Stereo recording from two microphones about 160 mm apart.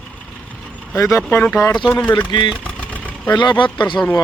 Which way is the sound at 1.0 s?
20° left (ahead or behind).